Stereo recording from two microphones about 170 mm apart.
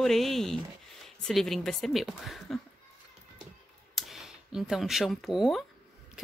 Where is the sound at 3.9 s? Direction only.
Centre (ahead or behind).